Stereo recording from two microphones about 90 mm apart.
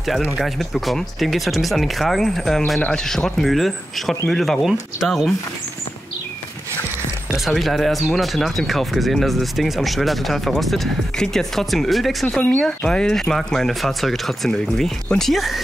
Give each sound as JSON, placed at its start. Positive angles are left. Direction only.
{"t": 0.0, "sound": "speech", "side_deg": 0}
{"t": 7.2, "sound": "speech", "side_deg": 0}